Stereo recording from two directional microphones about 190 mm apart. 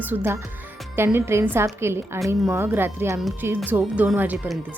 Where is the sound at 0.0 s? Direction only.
10° right (ahead or behind).